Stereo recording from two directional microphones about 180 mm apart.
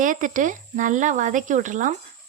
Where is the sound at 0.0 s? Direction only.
45° right (ahead or behind).